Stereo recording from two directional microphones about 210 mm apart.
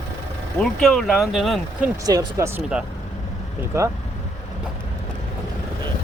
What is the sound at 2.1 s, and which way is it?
Speech, 15° right (ahead or behind).